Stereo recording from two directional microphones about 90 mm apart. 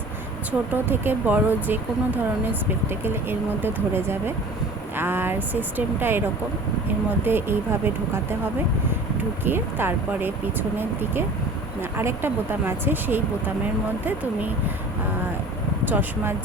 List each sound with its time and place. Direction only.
0.7 s speech: 20° right (ahead or behind)
9.4 s speech: 25° right (ahead or behind)
15.9 s speech: 20° right (ahead or behind)